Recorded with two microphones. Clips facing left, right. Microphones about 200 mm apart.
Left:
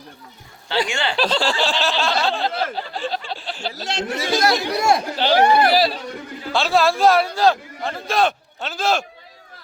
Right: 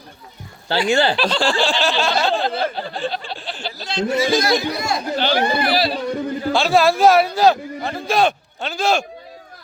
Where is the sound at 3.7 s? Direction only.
90° left.